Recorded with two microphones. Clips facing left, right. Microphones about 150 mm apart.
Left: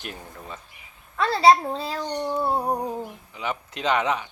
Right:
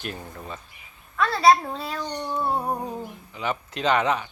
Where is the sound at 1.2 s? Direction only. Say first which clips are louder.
Left 1 dB; 30° left (ahead or behind).